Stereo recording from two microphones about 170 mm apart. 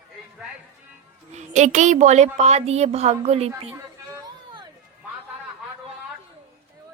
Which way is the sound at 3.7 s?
15° right (ahead or behind).